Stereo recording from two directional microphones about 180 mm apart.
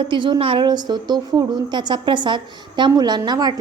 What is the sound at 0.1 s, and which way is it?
A woman's voice, 25° right (ahead or behind).